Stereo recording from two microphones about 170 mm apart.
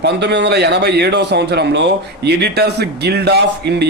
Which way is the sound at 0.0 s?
85° right.